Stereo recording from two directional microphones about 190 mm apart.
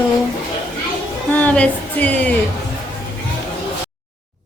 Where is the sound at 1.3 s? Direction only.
5° left (ahead or behind).